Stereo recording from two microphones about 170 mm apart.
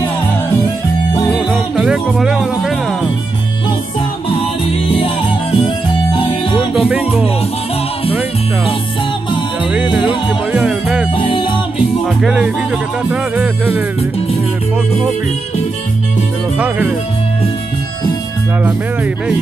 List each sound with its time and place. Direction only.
1.5 s music: centre (ahead or behind)
4.7 s music: 35° left (ahead or behind)
6.7 s music: 5° right (ahead or behind)
9.7 s music: 5° right (ahead or behind)
11.1 s music: 30° left (ahead or behind)
12.0 s music: 5° right (ahead or behind)
16.5 s music: 10° right (ahead or behind)